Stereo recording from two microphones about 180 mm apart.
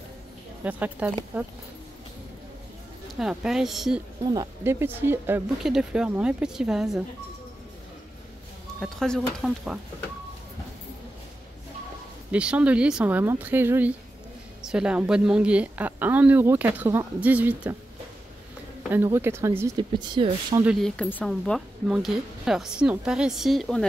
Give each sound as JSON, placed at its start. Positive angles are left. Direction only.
{"t": 0.7, "sound": "a woman's voice", "side_deg": -10}
{"t": 3.2, "sound": "speech", "side_deg": -5}
{"t": 4.2, "sound": "a woman's voice", "side_deg": -20}
{"t": 8.7, "sound": "speech", "side_deg": 0}
{"t": 12.3, "sound": "a woman's voice", "side_deg": -5}
{"t": 19.1, "sound": "a woman's voice", "side_deg": -15}
{"t": 20.6, "sound": "speech", "side_deg": 0}